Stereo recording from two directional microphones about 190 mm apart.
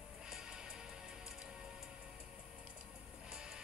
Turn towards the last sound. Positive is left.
turn(degrees=-5)  # may be behind; listen again after turning